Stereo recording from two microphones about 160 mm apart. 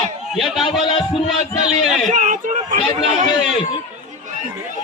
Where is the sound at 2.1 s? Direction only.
50° right (ahead or behind).